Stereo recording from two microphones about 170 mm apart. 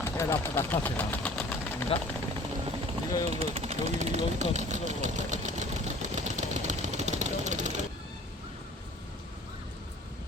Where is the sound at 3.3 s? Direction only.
35° right (ahead or behind).